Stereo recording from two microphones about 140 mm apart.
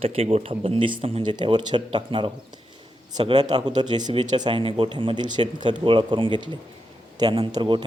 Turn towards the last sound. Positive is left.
turn(degrees=-30)  # may be behind; listen again after turning